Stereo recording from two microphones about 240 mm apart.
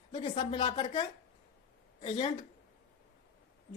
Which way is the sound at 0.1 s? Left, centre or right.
Left.